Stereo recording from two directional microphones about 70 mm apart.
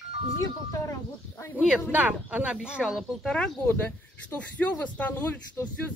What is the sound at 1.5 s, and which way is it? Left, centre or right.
Speech, centre.